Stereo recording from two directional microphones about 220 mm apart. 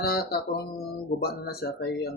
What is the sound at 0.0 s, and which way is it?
Speech, 45° left (ahead or behind).